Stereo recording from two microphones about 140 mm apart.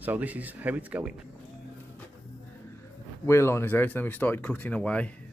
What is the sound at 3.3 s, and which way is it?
Speech, 20° left (ahead or behind).